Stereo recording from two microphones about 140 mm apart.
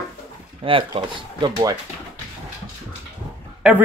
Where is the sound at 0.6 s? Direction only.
40° right (ahead or behind).